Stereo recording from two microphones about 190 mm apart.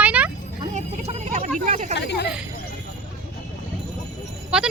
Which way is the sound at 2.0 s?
65° left (ahead or behind).